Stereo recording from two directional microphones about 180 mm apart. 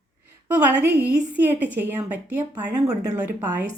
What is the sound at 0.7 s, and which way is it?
A woman's voice, 10° right (ahead or behind).